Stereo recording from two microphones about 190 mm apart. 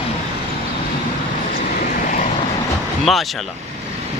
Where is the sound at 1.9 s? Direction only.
45° left (ahead or behind).